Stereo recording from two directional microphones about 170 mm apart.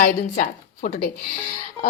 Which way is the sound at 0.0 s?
55° left (ahead or behind).